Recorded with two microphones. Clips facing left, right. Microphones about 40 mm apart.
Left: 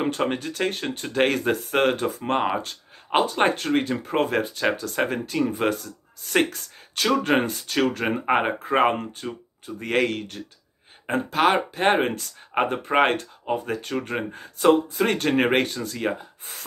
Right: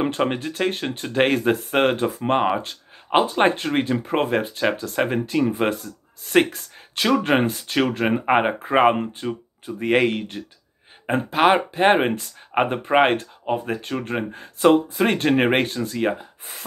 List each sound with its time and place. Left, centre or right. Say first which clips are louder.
0.0 s speech: right 2 dB; centre